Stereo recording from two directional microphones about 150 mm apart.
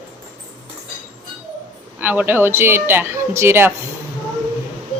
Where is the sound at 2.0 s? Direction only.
10° right (ahead or behind).